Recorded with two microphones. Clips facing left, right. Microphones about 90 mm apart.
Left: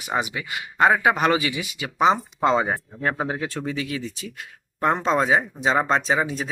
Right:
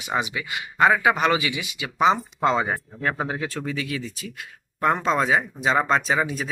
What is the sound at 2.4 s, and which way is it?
Speech, 25° left (ahead or behind).